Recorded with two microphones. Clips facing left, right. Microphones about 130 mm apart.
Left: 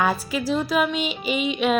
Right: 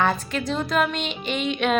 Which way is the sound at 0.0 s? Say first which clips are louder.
Even; 5° left (ahead or behind).